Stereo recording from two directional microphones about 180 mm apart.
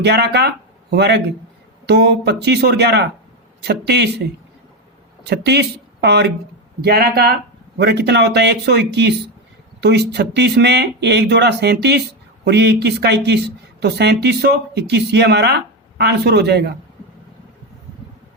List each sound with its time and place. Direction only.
0.0 s speech: 65° right (ahead or behind)